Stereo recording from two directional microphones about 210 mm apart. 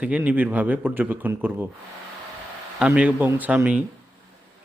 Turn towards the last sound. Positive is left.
turn(degrees=-5)  # may be behind; listen again after turning